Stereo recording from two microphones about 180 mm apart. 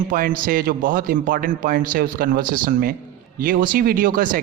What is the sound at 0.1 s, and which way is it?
Speech, 50° right (ahead or behind).